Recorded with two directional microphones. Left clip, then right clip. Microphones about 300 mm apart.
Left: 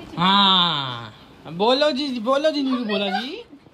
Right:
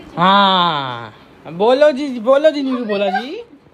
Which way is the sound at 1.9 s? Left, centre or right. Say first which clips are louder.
Right 6 dB; left.